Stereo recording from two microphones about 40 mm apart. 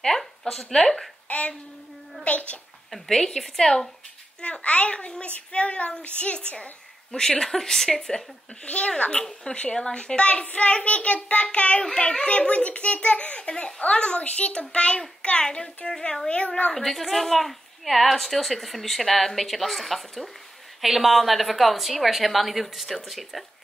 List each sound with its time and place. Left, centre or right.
0.0 s speech: centre
1.3 s a child's voice: left
2.9 s a woman's voice: centre
4.4 s a woman's voice: left
7.1 s a woman's voice: centre
8.6 s a woman's voice: left
12.4 s a child's voice: left
13.4 s a woman's voice: left
16.7 s a woman's voice: centre